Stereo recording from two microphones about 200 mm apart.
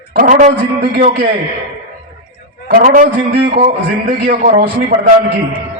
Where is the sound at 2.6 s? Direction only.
45° right (ahead or behind).